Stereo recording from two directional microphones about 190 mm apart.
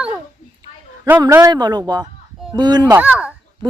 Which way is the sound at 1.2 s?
20° right (ahead or behind).